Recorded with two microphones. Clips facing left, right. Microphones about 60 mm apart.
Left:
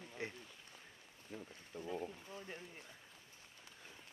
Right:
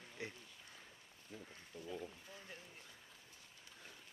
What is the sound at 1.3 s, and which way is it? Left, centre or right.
Speech, left.